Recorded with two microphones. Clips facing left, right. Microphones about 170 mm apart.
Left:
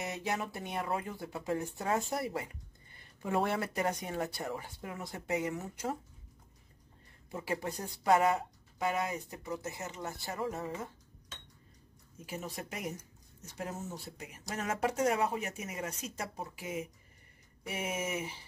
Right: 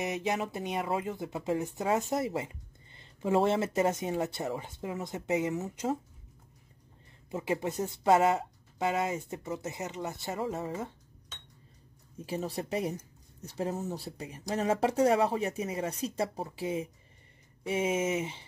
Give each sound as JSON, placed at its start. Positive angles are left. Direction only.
{"t": 0.0, "sound": "speech", "side_deg": -20}
{"t": 7.2, "sound": "speech", "side_deg": -20}
{"t": 12.3, "sound": "speech", "side_deg": -35}